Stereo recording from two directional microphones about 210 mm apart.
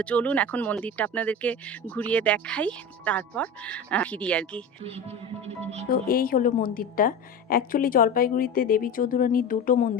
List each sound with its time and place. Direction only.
0.0 s speech: 5° left (ahead or behind)
5.9 s a woman's voice: 45° left (ahead or behind)